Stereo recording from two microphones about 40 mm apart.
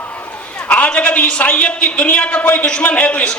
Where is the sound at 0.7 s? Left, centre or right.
Left.